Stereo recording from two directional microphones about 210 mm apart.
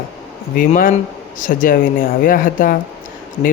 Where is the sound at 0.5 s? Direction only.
40° left (ahead or behind).